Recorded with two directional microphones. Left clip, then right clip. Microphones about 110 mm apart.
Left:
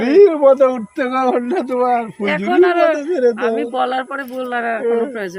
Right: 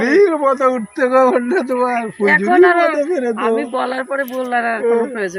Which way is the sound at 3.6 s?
20° left (ahead or behind).